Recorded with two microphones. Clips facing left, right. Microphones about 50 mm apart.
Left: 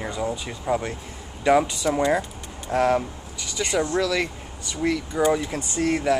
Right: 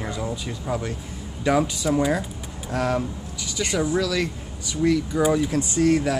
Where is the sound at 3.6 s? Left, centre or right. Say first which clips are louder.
Even; centre.